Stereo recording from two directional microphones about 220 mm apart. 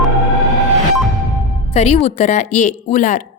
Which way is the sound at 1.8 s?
30° left (ahead or behind).